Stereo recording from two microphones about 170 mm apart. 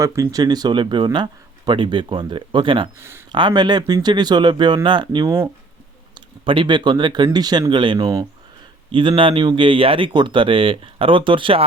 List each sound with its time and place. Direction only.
0.0 s speech: 20° right (ahead or behind)
3.0 s speech: 15° right (ahead or behind)
3.3 s speech: 25° right (ahead or behind)